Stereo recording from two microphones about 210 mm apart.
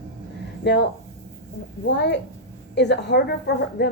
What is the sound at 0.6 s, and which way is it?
Speech, 55° left (ahead or behind).